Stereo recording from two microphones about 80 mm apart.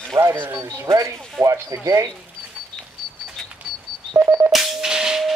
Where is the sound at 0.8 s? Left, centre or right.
Right.